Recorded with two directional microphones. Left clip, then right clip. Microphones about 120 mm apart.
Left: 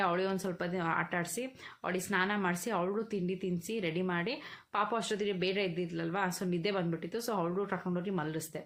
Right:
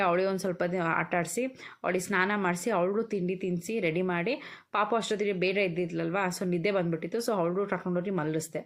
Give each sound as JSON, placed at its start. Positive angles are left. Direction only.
{"t": 0.0, "sound": "speech", "side_deg": -40}